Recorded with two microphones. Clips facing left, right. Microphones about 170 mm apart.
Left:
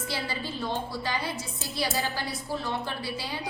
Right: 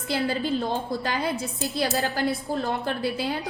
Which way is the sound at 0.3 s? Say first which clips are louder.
Right 7 dB; 50° right (ahead or behind).